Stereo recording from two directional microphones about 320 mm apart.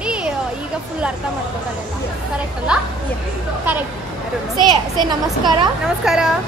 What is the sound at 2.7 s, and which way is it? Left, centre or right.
Speech, centre.